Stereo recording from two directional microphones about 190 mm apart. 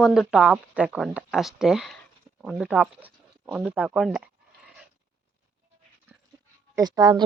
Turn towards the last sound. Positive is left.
turn(degrees=-20)  # may be behind; listen again after turning